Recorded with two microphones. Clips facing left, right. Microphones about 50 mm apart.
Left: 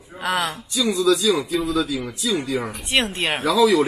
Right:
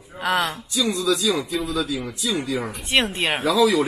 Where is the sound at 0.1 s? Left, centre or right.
Centre.